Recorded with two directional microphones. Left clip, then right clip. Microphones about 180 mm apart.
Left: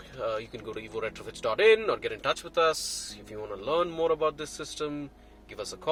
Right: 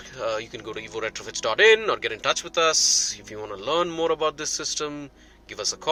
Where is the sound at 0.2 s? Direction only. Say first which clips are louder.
Right 4 dB; 15° right (ahead or behind).